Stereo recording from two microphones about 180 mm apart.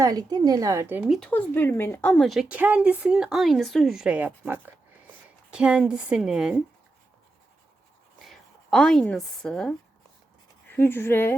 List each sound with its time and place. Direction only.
0.0 s a woman's voice: 20° right (ahead or behind); by 1.3 s centre (ahead or behind)
1.3 s a woman's voice: 10° left (ahead or behind)
8.2 s speech: centre (ahead or behind)